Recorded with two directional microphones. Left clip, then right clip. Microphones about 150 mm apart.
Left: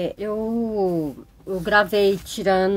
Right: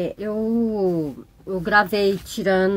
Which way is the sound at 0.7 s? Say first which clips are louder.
Even; 45° right (ahead or behind).